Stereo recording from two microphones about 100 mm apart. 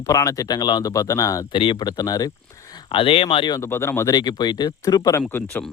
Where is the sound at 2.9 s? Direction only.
60° left (ahead or behind).